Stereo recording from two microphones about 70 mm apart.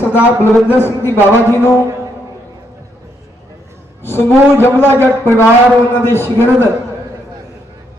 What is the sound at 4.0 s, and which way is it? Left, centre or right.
Speech, left.